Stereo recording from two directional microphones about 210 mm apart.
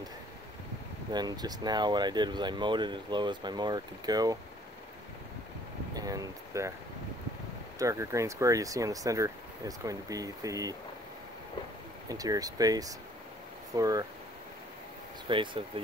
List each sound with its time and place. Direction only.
1.1 s speech: 20° right (ahead or behind)
5.9 s a sound: 15° right (ahead or behind)
7.8 s speech: 15° right (ahead or behind)
12.1 s speech: 15° right (ahead or behind)
15.2 s speech: 25° right (ahead or behind)